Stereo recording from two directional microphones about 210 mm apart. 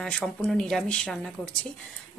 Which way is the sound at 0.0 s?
Centre (ahead or behind).